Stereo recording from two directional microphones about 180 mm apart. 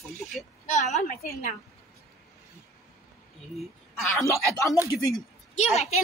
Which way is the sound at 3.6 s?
Centre (ahead or behind).